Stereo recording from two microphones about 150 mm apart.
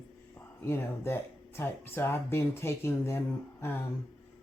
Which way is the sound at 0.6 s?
15° left (ahead or behind).